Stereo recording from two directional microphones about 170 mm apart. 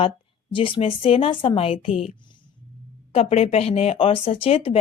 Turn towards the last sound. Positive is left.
turn(degrees=35)  # may be behind; listen again after turning